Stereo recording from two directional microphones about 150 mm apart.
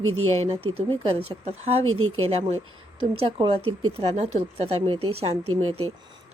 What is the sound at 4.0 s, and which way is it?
Speech, 45° right (ahead or behind).